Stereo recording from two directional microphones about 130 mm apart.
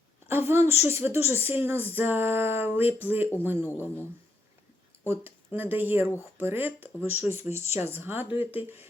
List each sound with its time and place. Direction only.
0.3 s a woman's voice: 20° right (ahead or behind)
3.7 s speech: 15° left (ahead or behind)
5.0 s a woman's voice: 15° right (ahead or behind)